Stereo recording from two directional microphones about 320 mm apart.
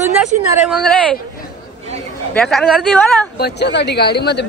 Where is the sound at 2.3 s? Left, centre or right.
Centre.